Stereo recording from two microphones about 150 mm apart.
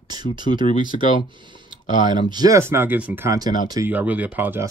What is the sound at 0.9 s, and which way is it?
Speech, 50° left (ahead or behind).